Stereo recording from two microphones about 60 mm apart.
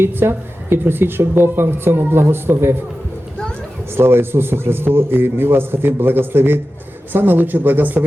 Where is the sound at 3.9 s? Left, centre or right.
Right.